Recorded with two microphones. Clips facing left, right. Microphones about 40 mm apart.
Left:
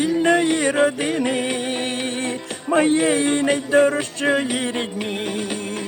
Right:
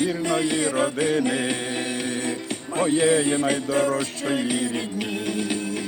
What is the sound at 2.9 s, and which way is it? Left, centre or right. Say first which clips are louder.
Music: left 2 dB; left.